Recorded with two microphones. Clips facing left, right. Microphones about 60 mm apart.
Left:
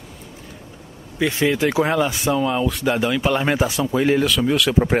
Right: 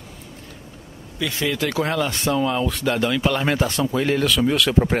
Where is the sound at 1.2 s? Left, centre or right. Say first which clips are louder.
Left 5 dB; left.